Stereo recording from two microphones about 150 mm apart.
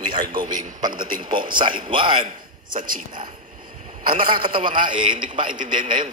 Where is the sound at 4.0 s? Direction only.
70° right (ahead or behind).